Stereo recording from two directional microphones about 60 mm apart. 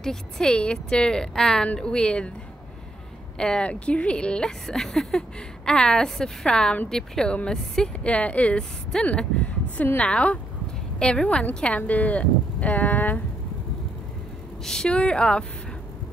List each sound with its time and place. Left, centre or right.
0.0 s speech: centre
3.3 s speech: centre
9.9 s speech: left
14.6 s speech: centre